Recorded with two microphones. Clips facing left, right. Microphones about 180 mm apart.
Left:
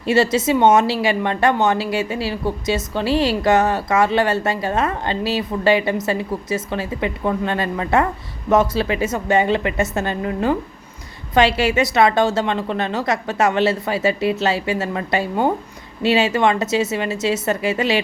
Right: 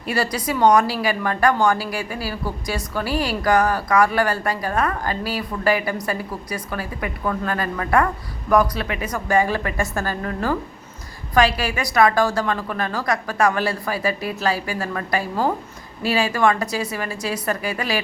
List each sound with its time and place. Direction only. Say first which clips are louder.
0.0 s a woman's voice: left 7 dB; 25° left (ahead or behind)